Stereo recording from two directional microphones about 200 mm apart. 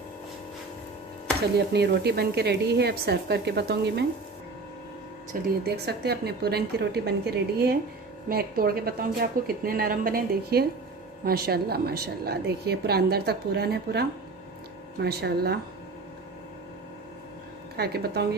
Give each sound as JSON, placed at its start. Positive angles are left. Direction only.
{"t": 1.7, "sound": "speech", "side_deg": -55}
{"t": 5.3, "sound": "a woman's voice", "side_deg": -50}
{"t": 17.7, "sound": "a woman's voice", "side_deg": -50}